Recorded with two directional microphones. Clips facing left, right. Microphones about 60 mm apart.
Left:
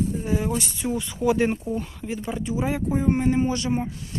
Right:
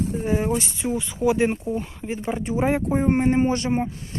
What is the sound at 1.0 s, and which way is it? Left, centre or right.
Speech, centre.